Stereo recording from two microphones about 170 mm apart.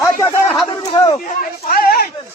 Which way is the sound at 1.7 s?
60° left (ahead or behind).